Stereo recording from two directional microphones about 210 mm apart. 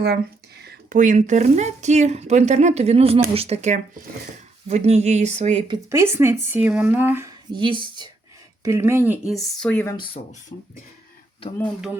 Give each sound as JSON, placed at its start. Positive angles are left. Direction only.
{"t": 0.6, "sound": "speech", "side_deg": -45}